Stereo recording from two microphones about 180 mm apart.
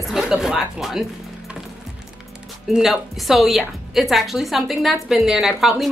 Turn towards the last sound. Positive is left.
turn(degrees=0)  # may be behind; listen again after turning